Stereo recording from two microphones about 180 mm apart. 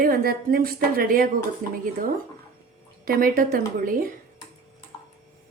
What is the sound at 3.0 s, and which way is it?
A woman's voice, 50° right (ahead or behind).